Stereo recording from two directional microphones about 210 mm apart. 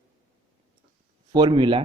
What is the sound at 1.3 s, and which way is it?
Speech, 20° right (ahead or behind).